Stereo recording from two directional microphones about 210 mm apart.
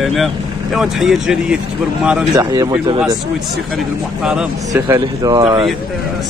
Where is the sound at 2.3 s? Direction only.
20° right (ahead or behind).